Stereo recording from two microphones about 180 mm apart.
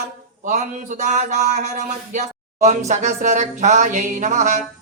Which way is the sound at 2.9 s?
40° right (ahead or behind).